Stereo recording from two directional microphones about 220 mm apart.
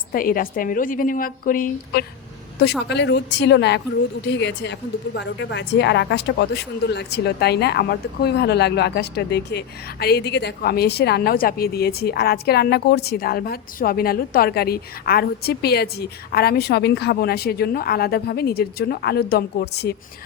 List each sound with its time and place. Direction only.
0.1 s a woman's voice: 40° left (ahead or behind)
2.9 s a woman's voice: 50° left (ahead or behind)